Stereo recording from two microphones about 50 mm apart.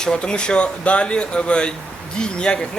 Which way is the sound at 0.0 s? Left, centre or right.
Centre.